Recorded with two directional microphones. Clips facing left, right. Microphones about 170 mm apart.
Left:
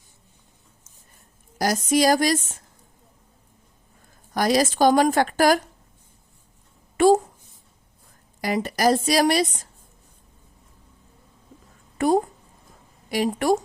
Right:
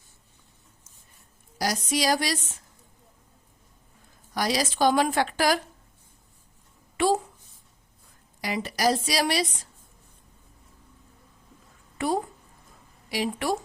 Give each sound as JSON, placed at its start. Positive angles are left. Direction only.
{"t": 1.5, "sound": "a woman's voice", "side_deg": 50}
{"t": 4.4, "sound": "a woman's voice", "side_deg": 50}
{"t": 6.9, "sound": "speech", "side_deg": 45}
{"t": 8.4, "sound": "a woman's voice", "side_deg": 50}
{"t": 11.9, "sound": "a woman's voice", "side_deg": 45}